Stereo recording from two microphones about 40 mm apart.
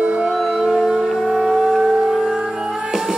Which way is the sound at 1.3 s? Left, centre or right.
Centre.